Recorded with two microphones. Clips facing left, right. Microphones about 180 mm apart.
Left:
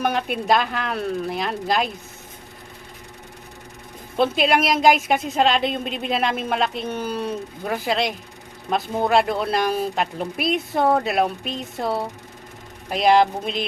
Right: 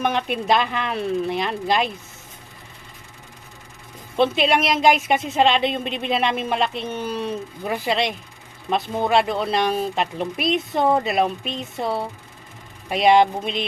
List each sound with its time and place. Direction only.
0.0 s a woman's voice: 5° left (ahead or behind)
4.2 s a woman's voice: centre (ahead or behind)